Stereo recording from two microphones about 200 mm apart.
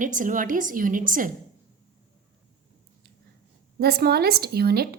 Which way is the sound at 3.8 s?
50° right (ahead or behind).